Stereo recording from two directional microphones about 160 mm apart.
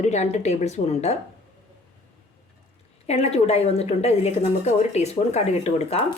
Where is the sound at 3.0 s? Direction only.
40° left (ahead or behind).